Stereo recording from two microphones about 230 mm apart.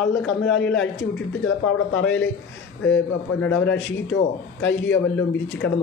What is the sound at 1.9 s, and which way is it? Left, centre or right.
Speech, left.